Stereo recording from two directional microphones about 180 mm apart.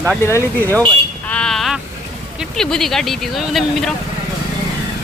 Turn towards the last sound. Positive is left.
turn(degrees=0)  # may be behind; listen again after turning